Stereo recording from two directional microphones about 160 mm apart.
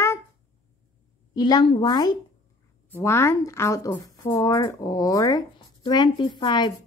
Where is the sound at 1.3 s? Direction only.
25° left (ahead or behind).